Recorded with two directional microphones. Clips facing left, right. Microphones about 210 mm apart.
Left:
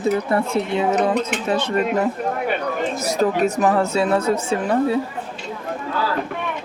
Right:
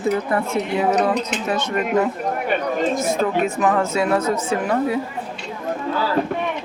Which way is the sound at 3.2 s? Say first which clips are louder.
Left 5 dB; 35° left (ahead or behind).